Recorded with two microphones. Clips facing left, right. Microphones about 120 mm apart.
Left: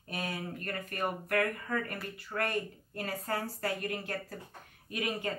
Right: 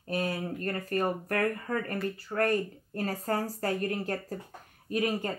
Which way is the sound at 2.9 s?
40° right (ahead or behind).